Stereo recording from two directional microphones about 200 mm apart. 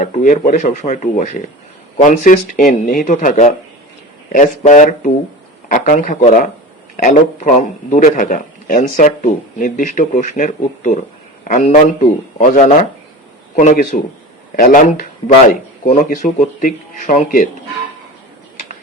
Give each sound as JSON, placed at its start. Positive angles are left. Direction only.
{"t": 0.0, "sound": "a man's voice", "side_deg": 40}